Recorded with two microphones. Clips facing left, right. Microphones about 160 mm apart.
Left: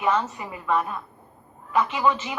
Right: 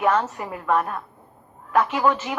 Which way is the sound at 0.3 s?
55° right (ahead or behind).